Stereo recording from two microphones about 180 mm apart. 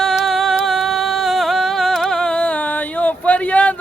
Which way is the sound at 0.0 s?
Centre (ahead or behind).